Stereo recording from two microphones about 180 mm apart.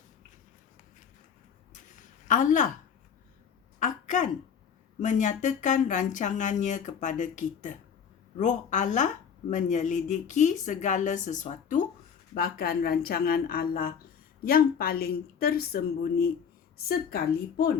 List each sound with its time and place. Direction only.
2.2 s a woman's voice: 45° left (ahead or behind)
3.8 s a sound: 45° left (ahead or behind)
4.9 s a woman's voice: 45° left (ahead or behind)
12.3 s a woman's voice: 55° left (ahead or behind)